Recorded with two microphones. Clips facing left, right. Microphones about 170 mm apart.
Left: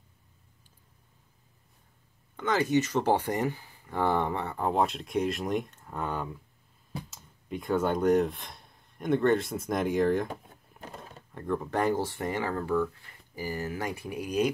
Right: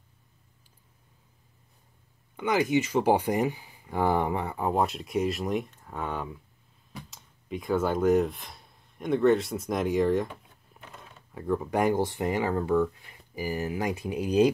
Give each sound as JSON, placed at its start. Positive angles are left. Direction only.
{"t": 2.3, "sound": "speech", "side_deg": -15}
{"t": 10.8, "sound": "a sound", "side_deg": 40}
{"t": 11.3, "sound": "speech", "side_deg": -10}